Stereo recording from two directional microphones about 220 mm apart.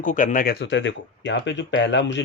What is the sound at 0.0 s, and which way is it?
Speech, 35° left (ahead or behind).